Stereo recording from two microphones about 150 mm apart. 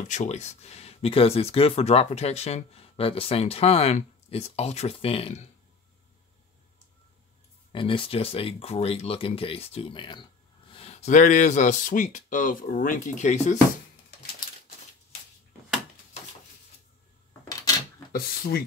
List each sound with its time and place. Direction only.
0.1 s speech: 50° left (ahead or behind)
7.7 s speech: 35° left (ahead or behind)
10.7 s speech: 40° left (ahead or behind)